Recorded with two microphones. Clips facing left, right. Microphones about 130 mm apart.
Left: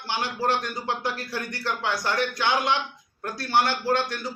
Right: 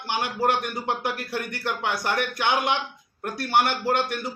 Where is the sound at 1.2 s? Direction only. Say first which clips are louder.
Right 2 dB; 55° right (ahead or behind).